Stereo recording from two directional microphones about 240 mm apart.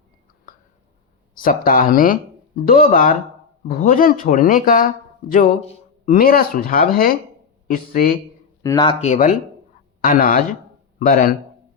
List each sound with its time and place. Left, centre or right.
0.5 s a sound: left
1.4 s speech: left
8.6 s speech: centre; by 11.3 s left